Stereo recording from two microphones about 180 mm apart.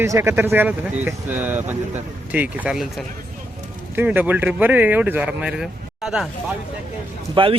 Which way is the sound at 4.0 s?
10° right (ahead or behind).